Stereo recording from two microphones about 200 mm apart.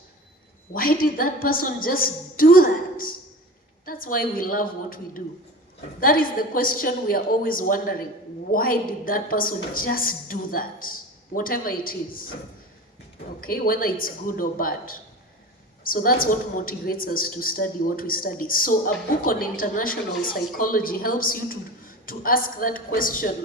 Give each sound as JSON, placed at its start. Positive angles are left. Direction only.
{"t": 0.7, "sound": "a woman's voice", "side_deg": 45}
{"t": 13.4, "sound": "a woman's voice", "side_deg": 45}